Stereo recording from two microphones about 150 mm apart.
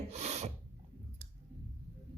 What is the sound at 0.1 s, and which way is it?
Speech, 50° right (ahead or behind).